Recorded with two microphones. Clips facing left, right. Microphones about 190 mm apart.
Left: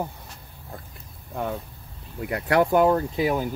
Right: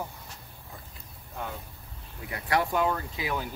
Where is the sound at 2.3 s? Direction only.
60° left (ahead or behind).